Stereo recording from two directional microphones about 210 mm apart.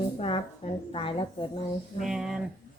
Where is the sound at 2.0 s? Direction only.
Centre (ahead or behind).